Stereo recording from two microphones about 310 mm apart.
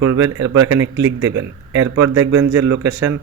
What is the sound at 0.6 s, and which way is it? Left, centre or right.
A man's voice, right.